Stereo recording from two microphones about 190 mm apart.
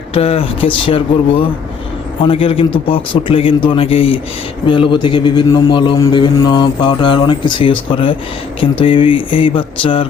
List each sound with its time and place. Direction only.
0.1 s a man's voice: 30° left (ahead or behind)